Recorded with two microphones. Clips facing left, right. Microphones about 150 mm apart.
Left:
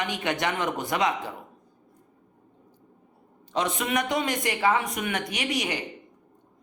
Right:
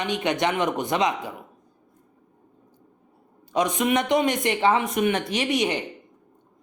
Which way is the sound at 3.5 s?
15° right (ahead or behind).